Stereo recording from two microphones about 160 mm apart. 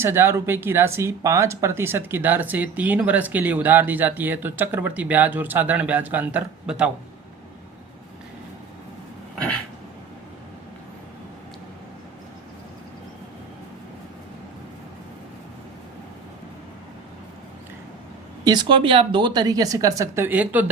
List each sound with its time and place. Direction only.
0.0 s speech: 15° right (ahead or behind)
18.4 s a woman's voice: 30° right (ahead or behind); by 20.7 s 10° right (ahead or behind)